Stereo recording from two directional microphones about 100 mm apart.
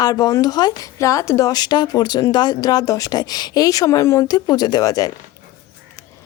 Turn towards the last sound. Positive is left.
turn(degrees=35)  # may be behind; listen again after turning